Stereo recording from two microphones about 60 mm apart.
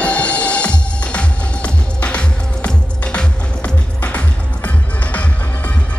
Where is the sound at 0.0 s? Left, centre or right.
Left.